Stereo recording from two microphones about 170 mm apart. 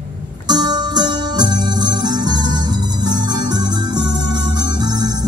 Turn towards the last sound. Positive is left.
turn(degrees=-25)  # may be behind; listen again after turning